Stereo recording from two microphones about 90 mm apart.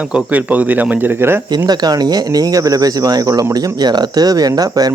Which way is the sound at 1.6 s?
50° right (ahead or behind).